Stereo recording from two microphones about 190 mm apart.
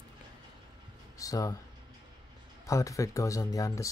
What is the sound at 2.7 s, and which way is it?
Speech, 15° left (ahead or behind).